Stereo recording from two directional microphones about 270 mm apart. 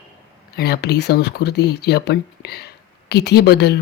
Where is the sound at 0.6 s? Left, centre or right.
Left.